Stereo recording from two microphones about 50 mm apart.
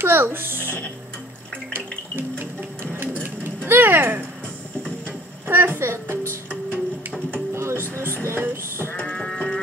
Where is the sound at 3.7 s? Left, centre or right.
Right.